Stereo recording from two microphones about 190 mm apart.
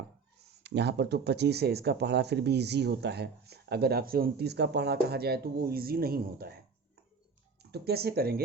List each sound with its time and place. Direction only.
0.6 s speech: 65° right (ahead or behind)
7.6 s speech: 55° right (ahead or behind)